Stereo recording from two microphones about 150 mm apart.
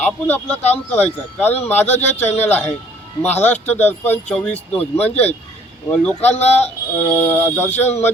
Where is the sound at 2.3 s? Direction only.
15° left (ahead or behind).